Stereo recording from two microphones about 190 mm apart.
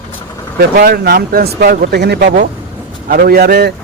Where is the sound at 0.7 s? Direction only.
55° right (ahead or behind).